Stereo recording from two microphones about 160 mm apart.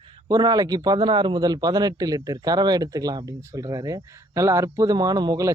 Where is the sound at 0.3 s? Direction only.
25° right (ahead or behind).